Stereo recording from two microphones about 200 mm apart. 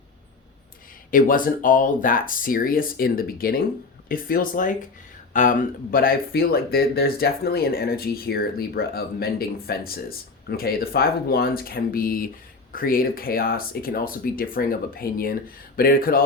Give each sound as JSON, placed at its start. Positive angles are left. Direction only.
{"t": 1.1, "sound": "speech", "side_deg": 45}